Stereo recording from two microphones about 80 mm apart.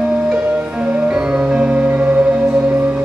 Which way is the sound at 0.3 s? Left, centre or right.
Centre.